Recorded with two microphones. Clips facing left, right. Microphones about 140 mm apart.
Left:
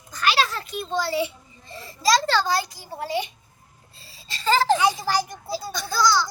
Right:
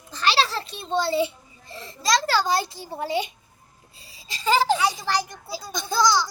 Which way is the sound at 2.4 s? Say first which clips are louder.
Right 1 dB; 25° right (ahead or behind).